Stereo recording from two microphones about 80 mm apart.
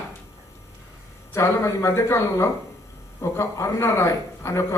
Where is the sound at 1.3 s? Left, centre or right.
Left.